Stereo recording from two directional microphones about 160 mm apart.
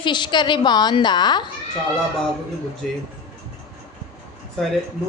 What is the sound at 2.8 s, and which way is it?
Speech, 5° left (ahead or behind).